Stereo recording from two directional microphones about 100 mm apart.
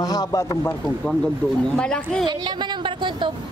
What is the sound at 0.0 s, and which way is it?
Speech, 35° left (ahead or behind).